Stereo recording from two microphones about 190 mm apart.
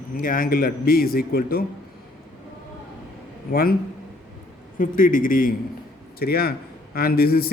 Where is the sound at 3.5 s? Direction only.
50° left (ahead or behind).